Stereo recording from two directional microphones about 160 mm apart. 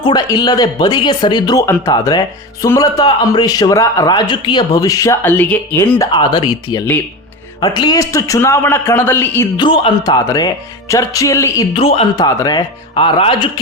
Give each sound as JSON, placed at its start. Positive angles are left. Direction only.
{"t": 0.0, "sound": "speech", "side_deg": 25}
{"t": 1.6, "sound": "speech", "side_deg": 15}
{"t": 6.0, "sound": "a man's voice", "side_deg": 30}
{"t": 9.6, "sound": "a man's voice", "side_deg": 30}
{"t": 10.2, "sound": "speech", "side_deg": 20}
{"t": 11.7, "sound": "a man's voice", "side_deg": 35}
{"t": 12.1, "sound": "speech", "side_deg": 25}